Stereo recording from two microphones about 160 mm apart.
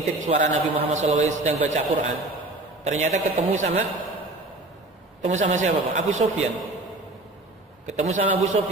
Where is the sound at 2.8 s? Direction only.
45° right (ahead or behind).